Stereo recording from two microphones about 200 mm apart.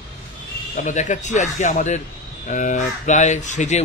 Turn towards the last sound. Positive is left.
turn(degrees=35)  # may be behind; listen again after turning